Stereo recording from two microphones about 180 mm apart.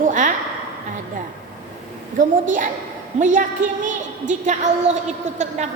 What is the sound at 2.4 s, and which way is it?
A woman's voice, 45° right (ahead or behind).